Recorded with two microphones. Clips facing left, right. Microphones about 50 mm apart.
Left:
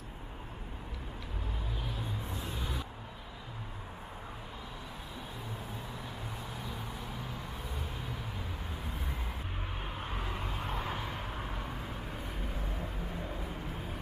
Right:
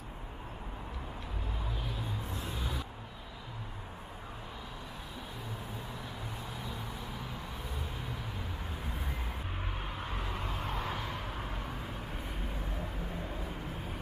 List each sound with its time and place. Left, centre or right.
2.3 s vehicle: centre
9.9 s vehicle: centre